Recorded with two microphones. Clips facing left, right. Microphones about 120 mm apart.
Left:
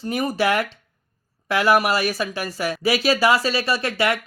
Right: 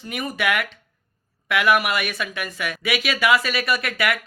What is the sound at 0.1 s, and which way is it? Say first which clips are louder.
Speech: left 4 dB; 35° left (ahead or behind).